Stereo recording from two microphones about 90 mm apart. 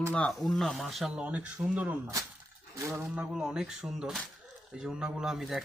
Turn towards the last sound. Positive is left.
turn(degrees=-5)  # may be behind; listen again after turning